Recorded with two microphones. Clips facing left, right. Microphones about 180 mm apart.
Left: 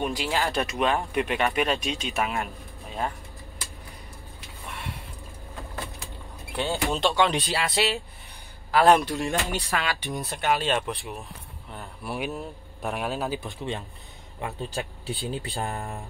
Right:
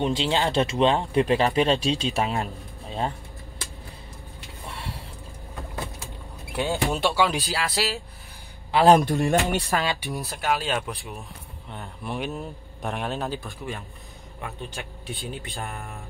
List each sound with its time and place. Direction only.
0.0 s speech: 25° right (ahead or behind)
2.4 s pigeon: 30° right (ahead or behind)
4.6 s a sound: 30° right (ahead or behind)
6.5 s a man's voice: 15° right (ahead or behind)
8.8 s a man's voice: 40° right (ahead or behind)
9.2 s speech: 60° right (ahead or behind)
10.1 s a man's voice: centre (ahead or behind)
13.4 s speech: 25° left (ahead or behind)